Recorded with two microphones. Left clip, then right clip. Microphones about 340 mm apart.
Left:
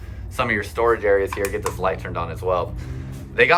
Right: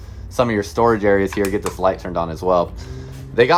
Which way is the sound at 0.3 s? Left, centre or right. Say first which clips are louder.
Right 4 dB; centre.